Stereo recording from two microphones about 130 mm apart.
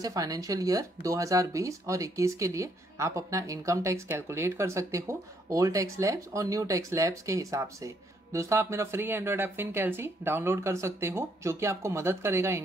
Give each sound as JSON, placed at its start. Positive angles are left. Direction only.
{"t": 0.0, "sound": "speech", "side_deg": -25}